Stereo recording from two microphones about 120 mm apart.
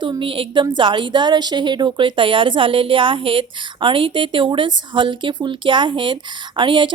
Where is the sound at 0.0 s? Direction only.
45° right (ahead or behind).